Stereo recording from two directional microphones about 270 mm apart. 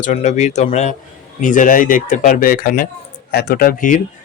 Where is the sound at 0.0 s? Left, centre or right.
Left.